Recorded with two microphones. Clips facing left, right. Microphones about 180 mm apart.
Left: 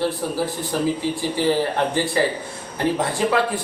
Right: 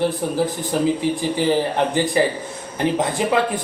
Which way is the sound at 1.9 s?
15° right (ahead or behind).